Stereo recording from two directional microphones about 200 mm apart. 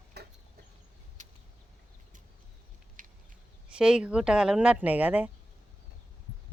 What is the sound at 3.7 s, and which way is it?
Speech, 5° right (ahead or behind).